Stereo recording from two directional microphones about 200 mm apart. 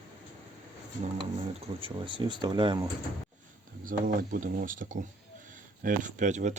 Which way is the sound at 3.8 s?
45° right (ahead or behind).